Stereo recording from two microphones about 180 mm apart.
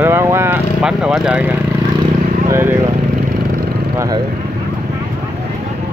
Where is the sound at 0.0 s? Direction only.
15° right (ahead or behind).